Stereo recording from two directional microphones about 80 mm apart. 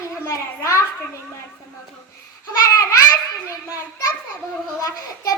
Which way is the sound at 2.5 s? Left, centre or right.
Left.